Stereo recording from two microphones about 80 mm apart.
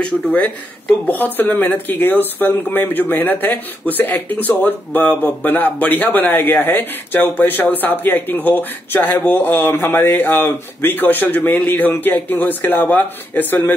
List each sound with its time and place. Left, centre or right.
0.0 s speech: centre